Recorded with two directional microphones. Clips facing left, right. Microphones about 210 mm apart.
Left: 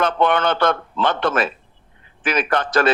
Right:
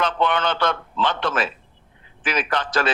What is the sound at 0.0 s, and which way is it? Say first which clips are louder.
A man's voice: left 4 dB; 55° left (ahead or behind).